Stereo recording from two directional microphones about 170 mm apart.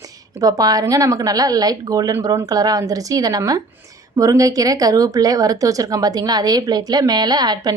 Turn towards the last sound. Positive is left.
turn(degrees=-25)  # may be behind; listen again after turning